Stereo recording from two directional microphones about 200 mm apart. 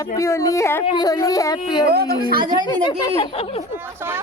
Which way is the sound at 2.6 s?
20° left (ahead or behind).